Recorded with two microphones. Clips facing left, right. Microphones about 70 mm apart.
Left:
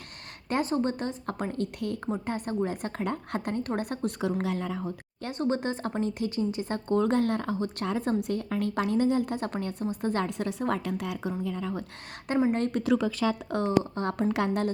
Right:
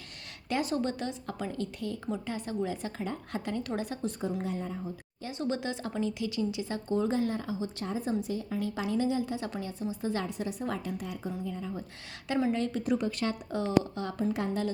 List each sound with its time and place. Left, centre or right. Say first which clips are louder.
0.4 s speech: left 3 dB; left
2.0 s speech: left 3 dB; left
3.8 s speech: left 3 dB; left
4.4 s a woman's voice: left 4 dB; left
5.4 s speech: left 4 dB; left
10.2 s a woman's voice: left 5 dB; left
12.5 s a woman's voice: left 4 dB; left